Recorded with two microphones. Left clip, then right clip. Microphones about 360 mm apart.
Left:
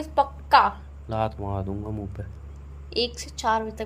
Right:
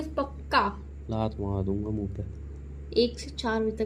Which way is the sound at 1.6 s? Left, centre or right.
Left.